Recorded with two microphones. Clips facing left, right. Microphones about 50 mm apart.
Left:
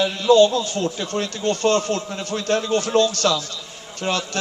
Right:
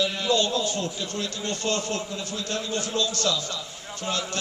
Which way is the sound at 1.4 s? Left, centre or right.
Left.